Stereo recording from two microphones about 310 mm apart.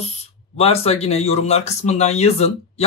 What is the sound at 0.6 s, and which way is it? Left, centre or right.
Speech, centre.